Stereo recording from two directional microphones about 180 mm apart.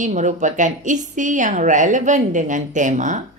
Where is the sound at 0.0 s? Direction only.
45° right (ahead or behind).